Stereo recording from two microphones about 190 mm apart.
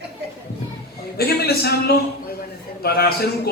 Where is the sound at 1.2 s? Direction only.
55° left (ahead or behind).